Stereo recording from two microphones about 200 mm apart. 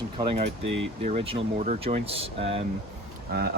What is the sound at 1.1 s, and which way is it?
Speech, 35° right (ahead or behind).